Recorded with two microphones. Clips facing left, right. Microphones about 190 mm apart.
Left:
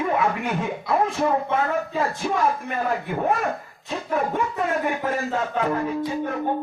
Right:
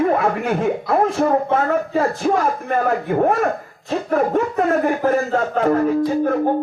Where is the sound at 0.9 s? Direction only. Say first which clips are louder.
Right 3 dB; 45° right (ahead or behind).